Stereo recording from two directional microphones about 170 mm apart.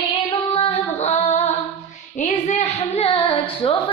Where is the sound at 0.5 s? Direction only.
40° left (ahead or behind).